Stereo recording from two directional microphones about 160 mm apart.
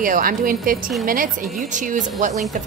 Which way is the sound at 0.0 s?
60° right (ahead or behind).